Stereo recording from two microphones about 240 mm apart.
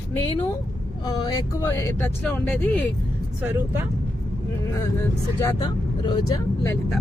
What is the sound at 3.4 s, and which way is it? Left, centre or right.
Speech, centre.